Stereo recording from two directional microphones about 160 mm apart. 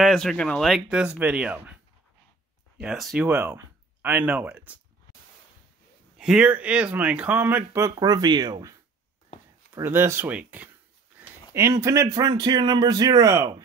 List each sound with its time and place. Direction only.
0.0 s speech: centre (ahead or behind)
2.8 s speech: 5° right (ahead or behind)
6.1 s speech: 5° right (ahead or behind)
7.9 s speech: 25° right (ahead or behind)
9.8 s speech: 15° right (ahead or behind)